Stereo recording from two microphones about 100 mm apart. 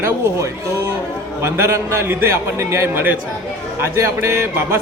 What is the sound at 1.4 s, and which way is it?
A man's voice, 25° right (ahead or behind).